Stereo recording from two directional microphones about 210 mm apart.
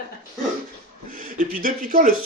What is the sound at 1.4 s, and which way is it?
Speech, 40° right (ahead or behind).